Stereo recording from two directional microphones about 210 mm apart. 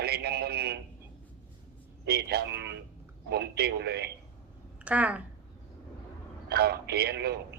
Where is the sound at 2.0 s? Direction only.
50° right (ahead or behind).